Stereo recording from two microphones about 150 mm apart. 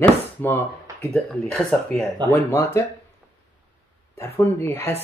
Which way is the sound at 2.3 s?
20° left (ahead or behind).